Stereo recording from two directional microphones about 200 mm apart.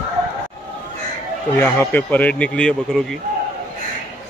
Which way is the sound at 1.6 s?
10° left (ahead or behind).